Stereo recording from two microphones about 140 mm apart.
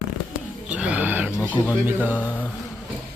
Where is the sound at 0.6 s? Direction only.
10° right (ahead or behind).